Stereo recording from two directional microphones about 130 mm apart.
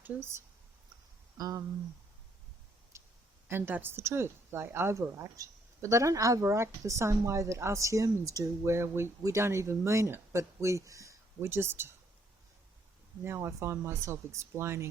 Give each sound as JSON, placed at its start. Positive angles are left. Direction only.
{"t": 0.0, "sound": "a woman's voice", "side_deg": -15}
{"t": 2.9, "sound": "a sound", "side_deg": -20}
{"t": 3.5, "sound": "a woman's voice", "side_deg": -15}
{"t": 13.2, "sound": "a woman's voice", "side_deg": -20}